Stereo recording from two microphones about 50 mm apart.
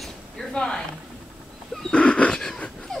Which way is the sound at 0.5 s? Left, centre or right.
Centre.